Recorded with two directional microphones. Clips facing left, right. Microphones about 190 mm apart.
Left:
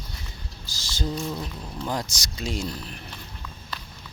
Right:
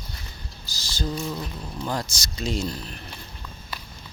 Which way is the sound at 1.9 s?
10° left (ahead or behind).